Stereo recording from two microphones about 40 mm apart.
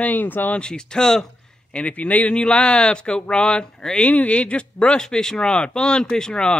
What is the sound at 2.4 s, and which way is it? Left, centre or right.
Speech, left.